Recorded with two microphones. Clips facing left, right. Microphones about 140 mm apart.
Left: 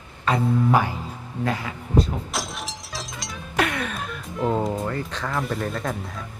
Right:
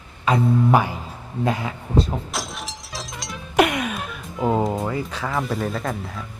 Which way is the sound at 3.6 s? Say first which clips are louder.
Right 6 dB; 15° right (ahead or behind).